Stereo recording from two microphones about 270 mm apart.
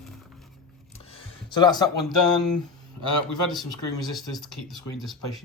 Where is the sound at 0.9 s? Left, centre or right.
Centre.